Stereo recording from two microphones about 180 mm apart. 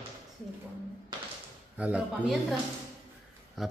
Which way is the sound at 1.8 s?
10° right (ahead or behind).